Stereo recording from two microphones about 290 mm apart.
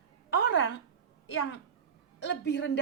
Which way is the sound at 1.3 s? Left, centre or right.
Left.